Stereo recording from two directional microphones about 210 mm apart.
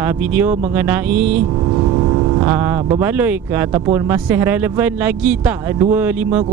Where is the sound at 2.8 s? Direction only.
10° right (ahead or behind).